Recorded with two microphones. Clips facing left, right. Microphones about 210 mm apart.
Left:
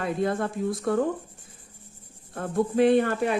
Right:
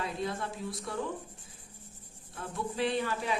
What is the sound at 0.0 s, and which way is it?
A woman's voice, 55° left (ahead or behind).